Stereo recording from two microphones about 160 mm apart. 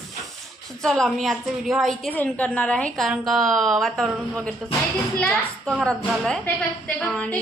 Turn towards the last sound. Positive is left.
turn(degrees=5)  # may be behind; listen again after turning